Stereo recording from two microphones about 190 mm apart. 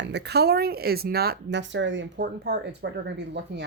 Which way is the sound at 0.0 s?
60° right (ahead or behind).